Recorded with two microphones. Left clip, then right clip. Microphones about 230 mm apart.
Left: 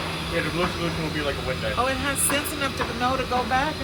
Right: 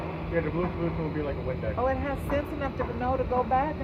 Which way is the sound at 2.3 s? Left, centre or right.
Left.